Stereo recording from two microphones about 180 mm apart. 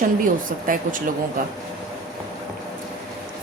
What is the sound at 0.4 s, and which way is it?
A woman's voice, 50° right (ahead or behind).